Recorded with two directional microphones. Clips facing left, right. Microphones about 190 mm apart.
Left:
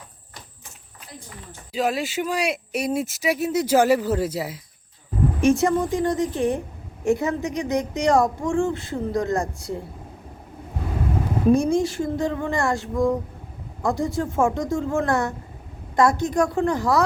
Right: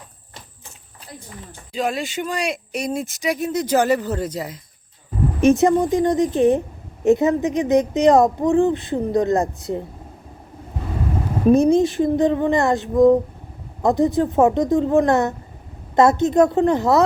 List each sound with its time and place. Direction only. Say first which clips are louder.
1.7 s speech: even; 5° left (ahead or behind)
5.4 s speech: right 5 dB; 20° right (ahead or behind)
11.5 s speech: right 8 dB; 20° right (ahead or behind)